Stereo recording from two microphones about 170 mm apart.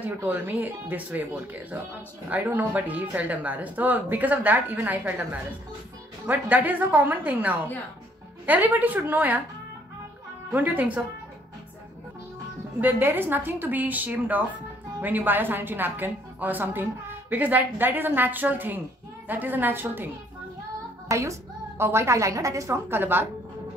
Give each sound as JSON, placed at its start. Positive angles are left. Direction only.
{"t": 0.0, "sound": "a woman's voice", "side_deg": -10}
{"t": 10.5, "sound": "a woman's voice", "side_deg": -10}
{"t": 12.8, "sound": "a woman's voice", "side_deg": -10}
{"t": 21.1, "sound": "a woman's voice", "side_deg": -20}